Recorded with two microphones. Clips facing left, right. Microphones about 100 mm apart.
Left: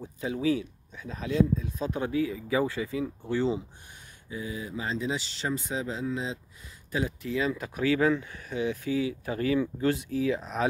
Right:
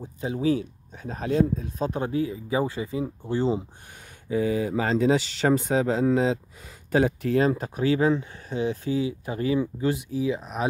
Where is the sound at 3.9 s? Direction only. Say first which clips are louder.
Right 13 dB; 80° right.